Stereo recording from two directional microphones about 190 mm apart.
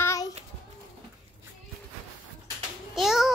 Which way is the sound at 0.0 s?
15° left (ahead or behind).